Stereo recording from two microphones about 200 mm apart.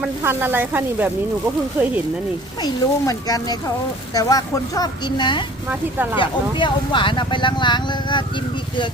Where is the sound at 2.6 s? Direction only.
20° left (ahead or behind).